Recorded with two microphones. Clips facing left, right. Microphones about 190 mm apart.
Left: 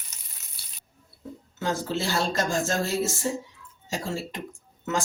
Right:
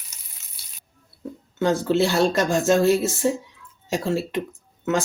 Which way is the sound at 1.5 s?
65° right (ahead or behind).